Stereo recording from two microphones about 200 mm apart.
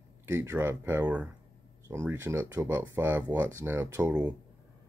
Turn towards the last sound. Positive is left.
turn(degrees=-15)  # may be behind; listen again after turning